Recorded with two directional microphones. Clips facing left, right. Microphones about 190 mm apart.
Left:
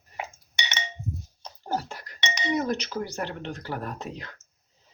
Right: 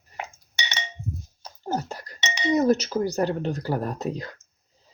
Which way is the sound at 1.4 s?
10° right (ahead or behind).